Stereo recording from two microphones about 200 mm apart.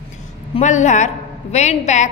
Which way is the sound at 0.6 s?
35° left (ahead or behind).